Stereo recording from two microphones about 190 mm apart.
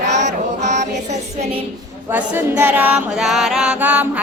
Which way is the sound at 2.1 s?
10° right (ahead or behind).